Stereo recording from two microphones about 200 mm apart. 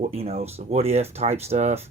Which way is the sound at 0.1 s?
30° right (ahead or behind).